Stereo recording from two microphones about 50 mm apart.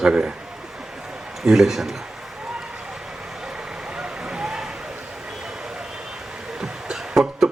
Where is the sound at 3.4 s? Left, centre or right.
Centre.